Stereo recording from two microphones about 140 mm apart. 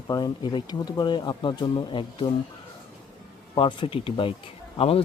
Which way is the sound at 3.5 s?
35° left (ahead or behind).